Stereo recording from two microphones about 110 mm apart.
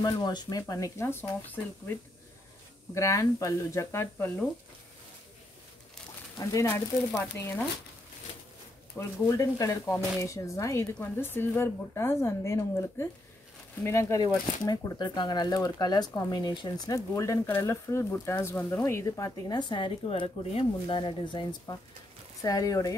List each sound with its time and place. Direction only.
0.0 s a woman's voice: 40° left (ahead or behind); by 4.3 s 25° left (ahead or behind)
6.4 s speech: 30° left (ahead or behind)
6.7 s a woman's voice: 10° left (ahead or behind)
8.9 s a woman's voice: 30° left (ahead or behind)
14.2 s a woman's voice: 35° left (ahead or behind)
19.5 s speech: 50° left (ahead or behind); by 22.9 s 30° left (ahead or behind)